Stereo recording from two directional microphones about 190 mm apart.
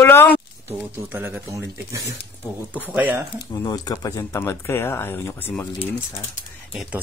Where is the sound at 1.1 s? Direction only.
10° right (ahead or behind).